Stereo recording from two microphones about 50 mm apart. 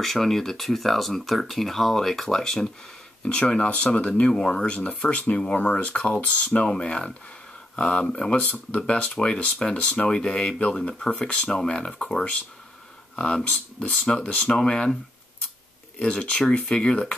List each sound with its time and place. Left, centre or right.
0.0 s speech: centre
3.3 s speech: left
16.0 s speech: left